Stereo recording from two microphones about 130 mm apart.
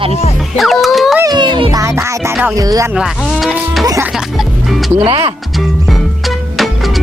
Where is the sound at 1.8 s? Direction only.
20° right (ahead or behind).